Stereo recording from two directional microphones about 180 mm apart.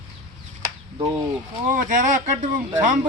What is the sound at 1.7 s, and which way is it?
Speech, 45° right (ahead or behind).